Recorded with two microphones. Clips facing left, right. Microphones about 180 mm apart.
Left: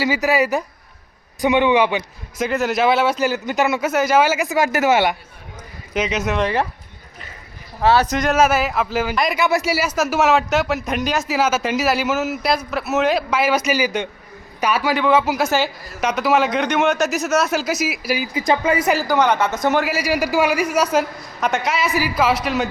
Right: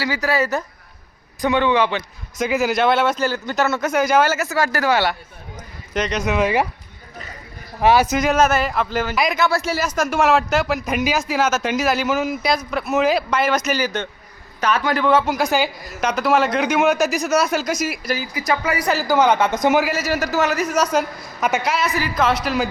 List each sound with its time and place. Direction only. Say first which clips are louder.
0.0 s speech: left 3 dB; 20° left (ahead or behind)
2.5 s speech: even; centre (ahead or behind); by 5.1 s 20° left (ahead or behind)
5.9 s speech: even; 5° left (ahead or behind)
7.8 s speech: right 1 dB; 10° right (ahead or behind); by 18.3 s 10° left (ahead or behind)
18.3 s speech: left 5 dB; 25° left (ahead or behind)
18.9 s speech: right 3 dB; 5° right (ahead or behind)
20.0 s speech: left 2 dB; 10° left (ahead or behind)